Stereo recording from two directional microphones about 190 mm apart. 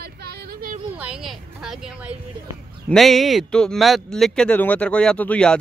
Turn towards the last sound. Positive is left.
turn(degrees=5)  # may be behind; listen again after turning